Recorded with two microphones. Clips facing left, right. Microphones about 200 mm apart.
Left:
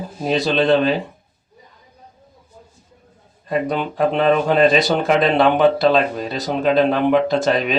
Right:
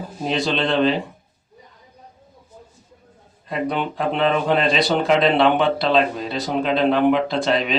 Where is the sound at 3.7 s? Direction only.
45° left (ahead or behind).